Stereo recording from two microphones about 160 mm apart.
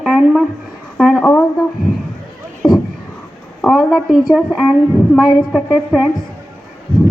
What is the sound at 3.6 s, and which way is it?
A woman's voice, centre (ahead or behind).